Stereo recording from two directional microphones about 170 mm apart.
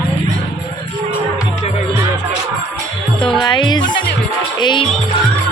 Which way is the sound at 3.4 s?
25° left (ahead or behind).